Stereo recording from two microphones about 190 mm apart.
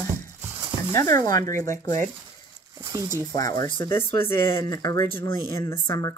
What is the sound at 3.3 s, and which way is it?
Speech, 20° left (ahead or behind).